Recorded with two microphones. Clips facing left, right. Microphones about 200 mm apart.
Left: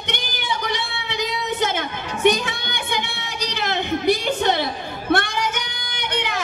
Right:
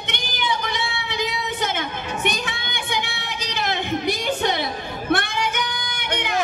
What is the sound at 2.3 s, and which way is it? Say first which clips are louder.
Music: left 3 dB; 55° left (ahead or behind).